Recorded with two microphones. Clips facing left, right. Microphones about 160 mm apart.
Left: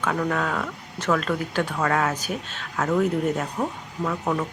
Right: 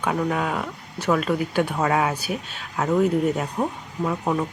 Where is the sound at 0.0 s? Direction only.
15° right (ahead or behind).